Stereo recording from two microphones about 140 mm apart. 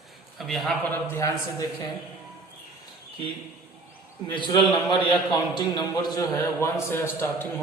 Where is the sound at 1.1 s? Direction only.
25° left (ahead or behind).